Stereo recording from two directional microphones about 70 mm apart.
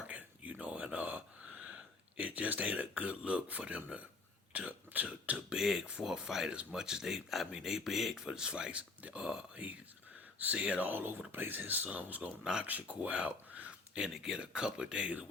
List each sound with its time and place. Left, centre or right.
0.1 s a sound: right
1.5 s speech: centre
5.5 s speech: centre